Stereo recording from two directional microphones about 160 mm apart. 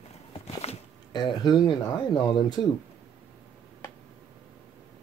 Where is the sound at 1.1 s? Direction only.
25° left (ahead or behind).